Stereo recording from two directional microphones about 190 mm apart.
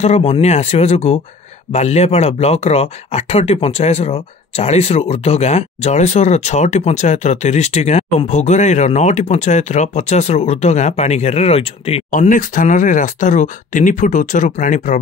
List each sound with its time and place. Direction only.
0.0 s speech: 35° left (ahead or behind)
12.1 s speech: 45° left (ahead or behind)